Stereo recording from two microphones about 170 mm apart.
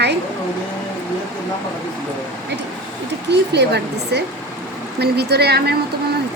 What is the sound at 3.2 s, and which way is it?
A woman's voice, 80° right.